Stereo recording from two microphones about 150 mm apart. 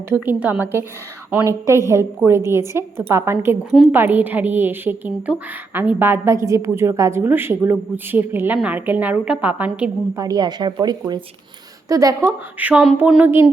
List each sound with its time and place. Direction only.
0.1 s a woman's voice: 10° right (ahead or behind)
10.2 s speech: 25° right (ahead or behind)
12.5 s a woman's voice: 10° right (ahead or behind)